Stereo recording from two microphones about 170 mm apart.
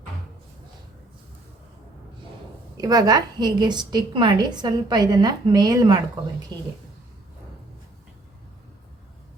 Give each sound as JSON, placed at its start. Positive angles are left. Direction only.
{"t": 2.8, "sound": "a woman's voice", "side_deg": -20}